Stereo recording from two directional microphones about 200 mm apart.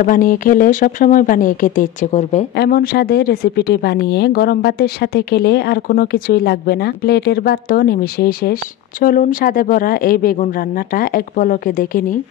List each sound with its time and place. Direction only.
0.0 s speech: 45° left (ahead or behind)
2.5 s speech: 50° left (ahead or behind)